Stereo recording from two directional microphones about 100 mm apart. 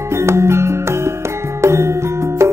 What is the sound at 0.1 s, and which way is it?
Music, 25° right (ahead or behind).